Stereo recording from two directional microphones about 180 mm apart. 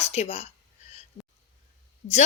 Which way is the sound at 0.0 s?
35° left (ahead or behind).